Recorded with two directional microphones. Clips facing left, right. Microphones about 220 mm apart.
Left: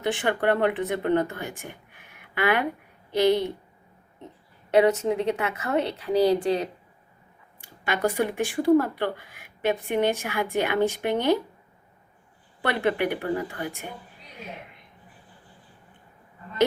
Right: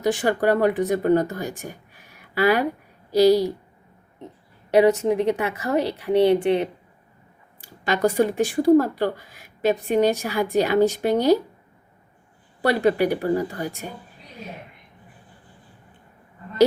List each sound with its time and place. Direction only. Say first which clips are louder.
0.0 s speech: right 4 dB; 35° right (ahead or behind)
2.1 s a sound: right 5 dB; 35° right (ahead or behind)
3.1 s speech: right 5 dB; 35° right (ahead or behind)
4.7 s speech: right 3 dB; 30° right (ahead or behind)
7.6 s speech: right 5 dB; 40° right (ahead or behind)
12.6 s speech: right 5 dB; 40° right (ahead or behind)